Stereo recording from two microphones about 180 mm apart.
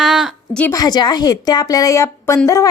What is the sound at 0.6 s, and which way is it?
A woman's voice, 15° left (ahead or behind).